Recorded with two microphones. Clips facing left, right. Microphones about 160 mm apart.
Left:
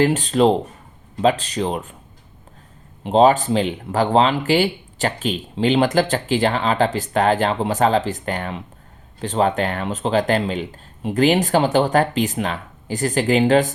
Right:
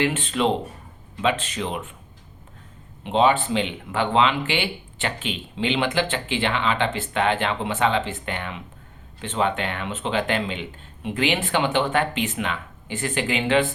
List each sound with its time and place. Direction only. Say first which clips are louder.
0.0 s speech: left 7 dB; 40° left (ahead or behind)
3.0 s speech: left 5 dB; 40° left (ahead or behind)